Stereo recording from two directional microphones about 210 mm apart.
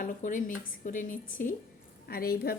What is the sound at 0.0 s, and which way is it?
A woman's voice, 35° left (ahead or behind).